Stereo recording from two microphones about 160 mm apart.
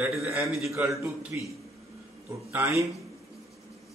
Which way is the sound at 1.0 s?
20° right (ahead or behind).